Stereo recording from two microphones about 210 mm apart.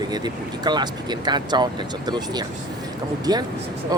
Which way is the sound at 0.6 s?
20° right (ahead or behind).